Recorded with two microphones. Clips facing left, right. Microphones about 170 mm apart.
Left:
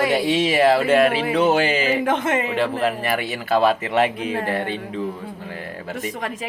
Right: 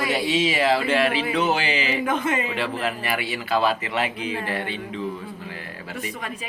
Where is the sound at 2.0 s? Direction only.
75° left (ahead or behind).